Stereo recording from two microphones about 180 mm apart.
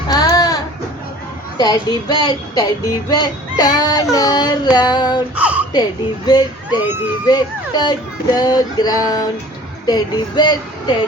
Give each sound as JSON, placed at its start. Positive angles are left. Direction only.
{"t": 0.1, "sound": "a sound", "side_deg": 20}
{"t": 1.5, "sound": "child singing", "side_deg": 20}
{"t": 5.3, "sound": "speech", "side_deg": -5}
{"t": 6.2, "sound": "child singing", "side_deg": 20}